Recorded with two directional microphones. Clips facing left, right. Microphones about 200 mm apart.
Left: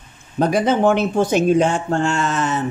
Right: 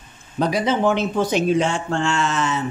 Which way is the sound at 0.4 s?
50° left (ahead or behind).